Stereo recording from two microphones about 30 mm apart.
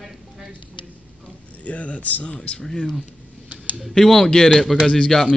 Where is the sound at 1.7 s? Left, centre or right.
Left.